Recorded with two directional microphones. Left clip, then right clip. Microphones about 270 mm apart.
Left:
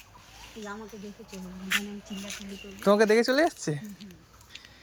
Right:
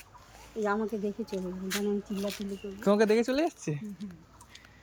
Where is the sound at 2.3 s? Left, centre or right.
Centre.